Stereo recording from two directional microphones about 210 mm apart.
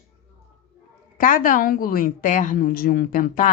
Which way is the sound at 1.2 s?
40° left (ahead or behind).